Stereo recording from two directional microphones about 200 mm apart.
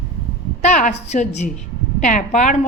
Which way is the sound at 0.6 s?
35° left (ahead or behind).